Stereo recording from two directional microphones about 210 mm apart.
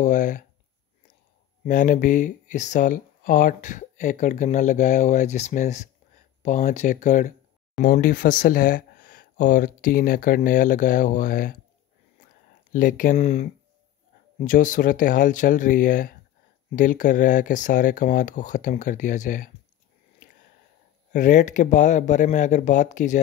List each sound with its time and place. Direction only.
0.0 s a sound: 40° left (ahead or behind)
1.6 s speech: 40° left (ahead or behind)
12.7 s speech: 40° left (ahead or behind)
21.1 s speech: 35° left (ahead or behind)